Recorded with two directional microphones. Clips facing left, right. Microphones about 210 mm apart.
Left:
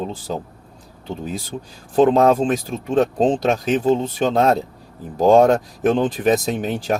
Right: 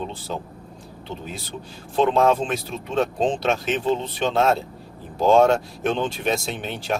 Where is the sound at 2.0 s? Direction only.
40° left (ahead or behind).